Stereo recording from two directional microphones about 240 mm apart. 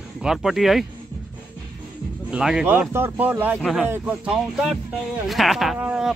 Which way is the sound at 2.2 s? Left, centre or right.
Centre.